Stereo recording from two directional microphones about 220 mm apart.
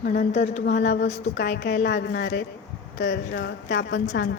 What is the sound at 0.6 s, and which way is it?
A woman's voice, 50° left (ahead or behind).